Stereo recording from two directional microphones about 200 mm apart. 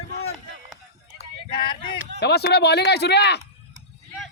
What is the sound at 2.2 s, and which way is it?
Speech, 55° left (ahead or behind).